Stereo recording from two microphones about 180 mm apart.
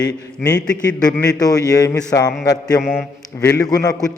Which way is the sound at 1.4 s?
20° left (ahead or behind).